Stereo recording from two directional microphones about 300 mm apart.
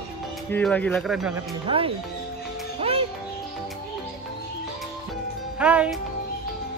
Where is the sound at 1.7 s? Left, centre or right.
Centre.